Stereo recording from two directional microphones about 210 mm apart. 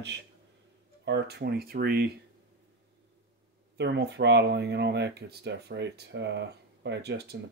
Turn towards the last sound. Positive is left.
turn(degrees=-50)  # may be behind; listen again after turning